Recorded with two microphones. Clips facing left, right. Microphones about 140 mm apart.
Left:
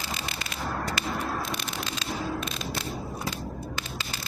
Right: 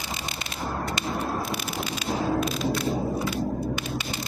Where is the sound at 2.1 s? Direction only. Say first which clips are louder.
Right 7 dB; 35° right (ahead or behind).